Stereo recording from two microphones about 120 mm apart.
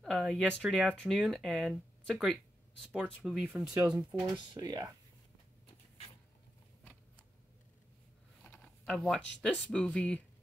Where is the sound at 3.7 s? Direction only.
30° right (ahead or behind).